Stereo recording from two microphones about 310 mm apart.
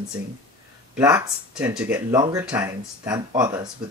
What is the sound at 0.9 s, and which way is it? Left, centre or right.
Speech, centre.